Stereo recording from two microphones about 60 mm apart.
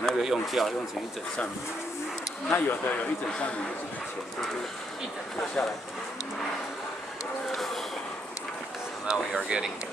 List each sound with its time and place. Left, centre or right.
0.0 s speech: centre
2.5 s speech: left
3.3 s speech: centre
5.6 s speech: centre
7.5 s a sound: centre
9.0 s speech: centre